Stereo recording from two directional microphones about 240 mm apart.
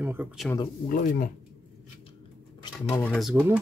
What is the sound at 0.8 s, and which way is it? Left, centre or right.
Speech, left.